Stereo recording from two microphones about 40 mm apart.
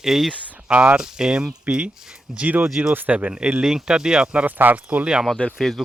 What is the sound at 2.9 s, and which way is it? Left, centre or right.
Speech, right.